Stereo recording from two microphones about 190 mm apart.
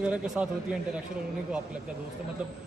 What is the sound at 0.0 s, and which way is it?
Speech, 5° right (ahead or behind).